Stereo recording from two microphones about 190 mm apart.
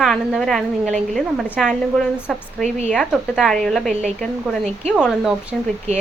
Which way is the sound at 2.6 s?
35° right (ahead or behind).